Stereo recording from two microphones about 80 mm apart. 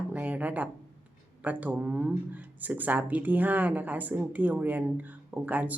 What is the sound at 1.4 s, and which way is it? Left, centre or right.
Speech, centre.